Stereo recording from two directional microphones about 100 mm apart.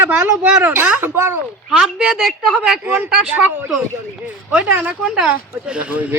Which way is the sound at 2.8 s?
20° right (ahead or behind).